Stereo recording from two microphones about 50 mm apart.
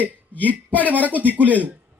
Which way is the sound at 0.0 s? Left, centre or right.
Left.